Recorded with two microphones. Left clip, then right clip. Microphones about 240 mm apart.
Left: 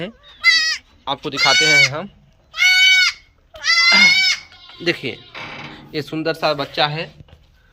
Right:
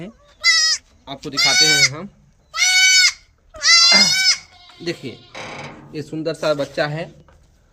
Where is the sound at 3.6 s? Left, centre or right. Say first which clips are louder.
Right 1 dB; right.